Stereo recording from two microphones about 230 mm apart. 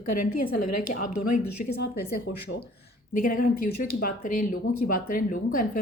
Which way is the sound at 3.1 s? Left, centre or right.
Left.